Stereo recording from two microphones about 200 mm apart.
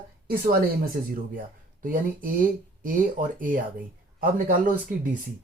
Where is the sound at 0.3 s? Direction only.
50° right (ahead or behind).